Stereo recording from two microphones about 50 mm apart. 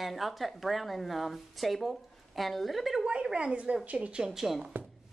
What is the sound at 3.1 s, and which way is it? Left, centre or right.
A woman's voice, right.